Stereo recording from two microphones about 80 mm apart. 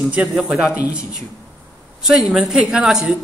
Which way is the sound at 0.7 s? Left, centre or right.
Centre.